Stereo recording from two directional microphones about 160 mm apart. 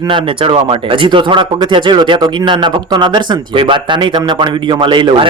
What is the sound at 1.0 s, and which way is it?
Speech, 30° right (ahead or behind).